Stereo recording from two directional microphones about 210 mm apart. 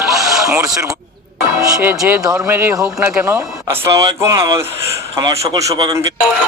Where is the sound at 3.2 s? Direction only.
15° right (ahead or behind).